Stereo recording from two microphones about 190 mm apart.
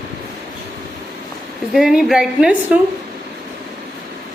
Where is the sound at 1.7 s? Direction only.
Centre (ahead or behind).